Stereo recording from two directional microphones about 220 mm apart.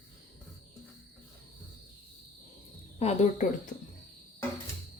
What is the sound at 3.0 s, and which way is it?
Speech, 30° left (ahead or behind).